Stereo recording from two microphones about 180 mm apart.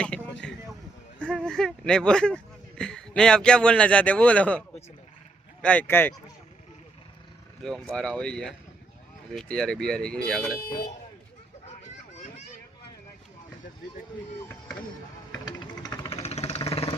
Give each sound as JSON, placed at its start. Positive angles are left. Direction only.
{"t": 1.2, "sound": "speech", "side_deg": 5}
{"t": 5.6, "sound": "speech", "side_deg": 10}
{"t": 7.6, "sound": "speech", "side_deg": 5}
{"t": 10.7, "sound": "speech", "side_deg": 55}
{"t": 15.3, "sound": "vehicle", "side_deg": 20}
{"t": 16.1, "sound": "vehicle", "side_deg": 35}